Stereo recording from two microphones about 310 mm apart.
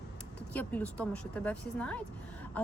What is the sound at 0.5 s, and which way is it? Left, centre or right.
Speech, centre.